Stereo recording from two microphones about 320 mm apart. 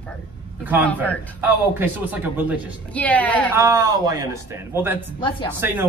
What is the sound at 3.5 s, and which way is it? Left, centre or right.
A man's voice, centre.